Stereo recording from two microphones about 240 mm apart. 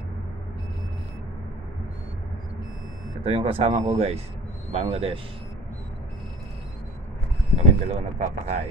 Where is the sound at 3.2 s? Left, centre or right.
Right.